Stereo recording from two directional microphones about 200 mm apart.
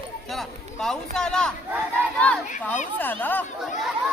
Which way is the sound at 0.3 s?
Centre (ahead or behind).